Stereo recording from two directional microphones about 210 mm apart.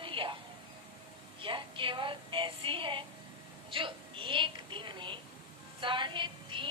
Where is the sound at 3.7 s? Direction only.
25° right (ahead or behind).